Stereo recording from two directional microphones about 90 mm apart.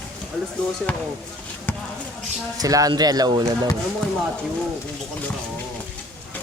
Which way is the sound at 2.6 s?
40° right (ahead or behind).